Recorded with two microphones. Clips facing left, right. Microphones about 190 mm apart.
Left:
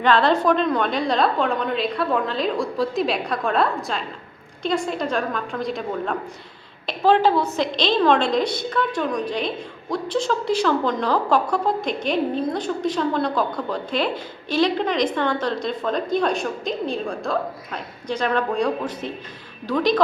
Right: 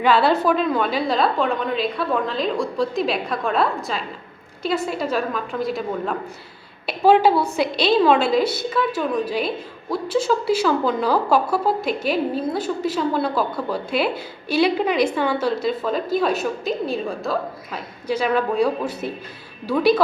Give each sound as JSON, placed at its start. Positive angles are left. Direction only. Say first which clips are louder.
{"t": 0.0, "sound": "a woman's voice", "louder": "right 1 dB", "side_deg": -5}